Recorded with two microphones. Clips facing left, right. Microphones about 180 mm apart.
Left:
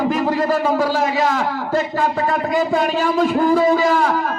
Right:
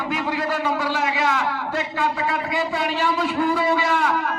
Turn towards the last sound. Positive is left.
turn(degrees=40)  # may be behind; listen again after turning